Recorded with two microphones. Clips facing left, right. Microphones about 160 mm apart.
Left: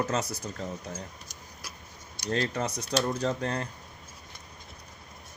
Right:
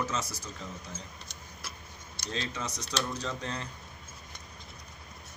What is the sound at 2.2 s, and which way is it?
Speech, 50° left (ahead or behind).